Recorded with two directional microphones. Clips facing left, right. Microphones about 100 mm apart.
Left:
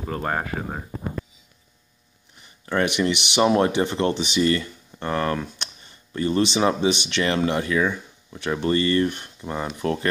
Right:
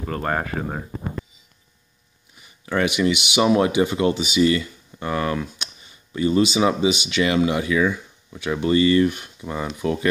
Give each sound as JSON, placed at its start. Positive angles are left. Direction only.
{"t": 0.0, "sound": "speech", "side_deg": 5}
{"t": 2.9, "sound": "speech", "side_deg": -10}
{"t": 9.8, "sound": "speech", "side_deg": 45}